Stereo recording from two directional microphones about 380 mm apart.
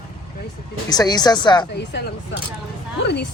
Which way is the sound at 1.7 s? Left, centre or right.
Left.